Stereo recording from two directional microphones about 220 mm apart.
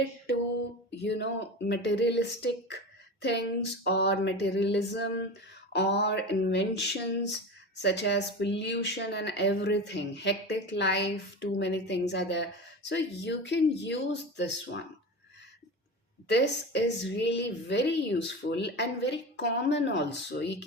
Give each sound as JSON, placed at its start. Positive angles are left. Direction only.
{"t": 1.0, "sound": "speech", "side_deg": 50}
{"t": 16.3, "sound": "speech", "side_deg": 50}